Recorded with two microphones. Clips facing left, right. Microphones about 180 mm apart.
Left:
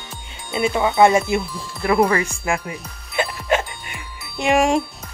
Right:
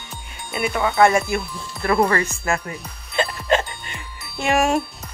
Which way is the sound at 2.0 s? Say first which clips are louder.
Left 1 dB; 5° left (ahead or behind).